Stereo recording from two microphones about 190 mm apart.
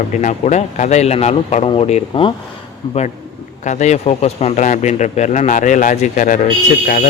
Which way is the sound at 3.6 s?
40° left (ahead or behind).